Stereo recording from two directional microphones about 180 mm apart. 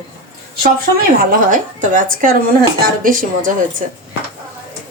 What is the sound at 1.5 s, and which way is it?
A woman's voice, 45° right (ahead or behind).